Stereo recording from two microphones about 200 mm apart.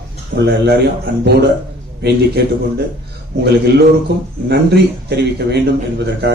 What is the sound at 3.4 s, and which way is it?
A man's voice, 55° right (ahead or behind).